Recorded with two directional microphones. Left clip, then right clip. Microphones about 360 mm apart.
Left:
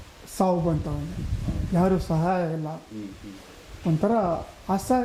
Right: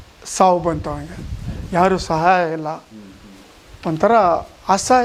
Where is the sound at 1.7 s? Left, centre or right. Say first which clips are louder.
Right 9 dB; centre.